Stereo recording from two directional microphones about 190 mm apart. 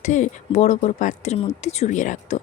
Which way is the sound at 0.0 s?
40° left (ahead or behind).